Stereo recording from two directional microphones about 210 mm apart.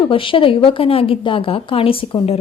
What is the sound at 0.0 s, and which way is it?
A woman's voice, 25° left (ahead or behind).